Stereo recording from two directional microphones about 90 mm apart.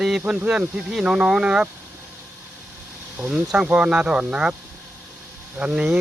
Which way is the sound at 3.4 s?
5° right (ahead or behind).